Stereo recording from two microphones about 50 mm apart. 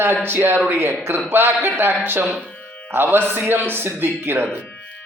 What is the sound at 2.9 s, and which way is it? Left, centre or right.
Speech, right.